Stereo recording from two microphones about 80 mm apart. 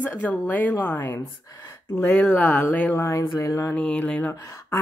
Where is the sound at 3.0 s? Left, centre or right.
Left.